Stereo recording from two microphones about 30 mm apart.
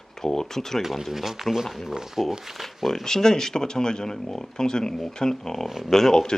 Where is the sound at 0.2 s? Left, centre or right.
Centre.